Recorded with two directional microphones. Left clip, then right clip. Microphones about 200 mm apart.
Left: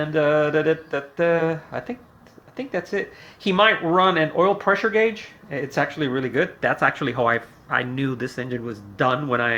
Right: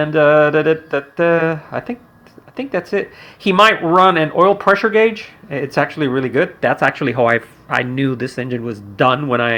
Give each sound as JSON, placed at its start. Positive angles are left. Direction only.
{"t": 0.0, "sound": "speech", "side_deg": -30}